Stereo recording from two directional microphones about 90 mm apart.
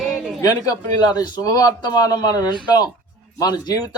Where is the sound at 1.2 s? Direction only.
45° left (ahead or behind).